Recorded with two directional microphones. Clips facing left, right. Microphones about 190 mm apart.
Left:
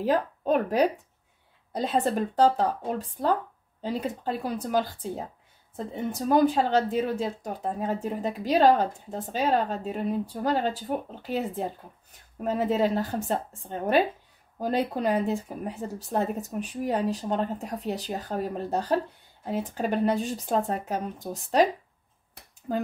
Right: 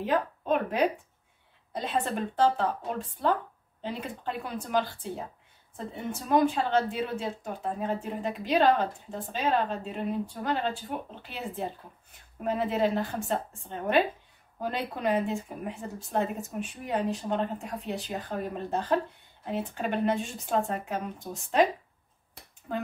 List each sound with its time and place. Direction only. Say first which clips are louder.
0.0 s speech: left 3 dB; 40° left (ahead or behind)